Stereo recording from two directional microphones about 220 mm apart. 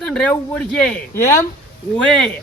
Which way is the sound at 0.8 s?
10° left (ahead or behind).